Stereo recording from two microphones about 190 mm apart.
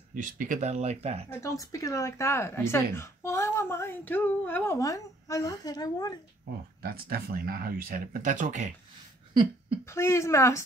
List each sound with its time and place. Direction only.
0.1 s speech: 40° right (ahead or behind)
1.3 s speech: 15° left (ahead or behind)
6.8 s speech: 50° right (ahead or behind)
9.3 s a sound: 25° right (ahead or behind)
9.8 s speech: 15° left (ahead or behind)